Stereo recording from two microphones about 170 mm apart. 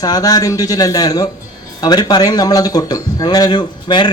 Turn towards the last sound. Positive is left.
turn(degrees=25)  # may be behind; listen again after turning